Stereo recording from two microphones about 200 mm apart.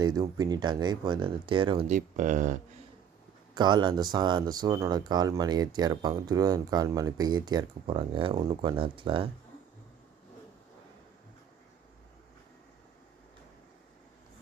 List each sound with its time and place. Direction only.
0.0 s speech: 20° right (ahead or behind)
1.9 s speech: 40° right (ahead or behind)
3.5 s speech: 20° right (ahead or behind)